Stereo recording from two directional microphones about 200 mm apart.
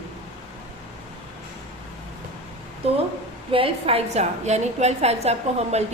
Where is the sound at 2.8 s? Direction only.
30° right (ahead or behind).